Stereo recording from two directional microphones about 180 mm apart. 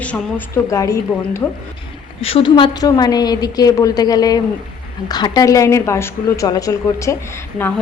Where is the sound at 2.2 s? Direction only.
30° left (ahead or behind).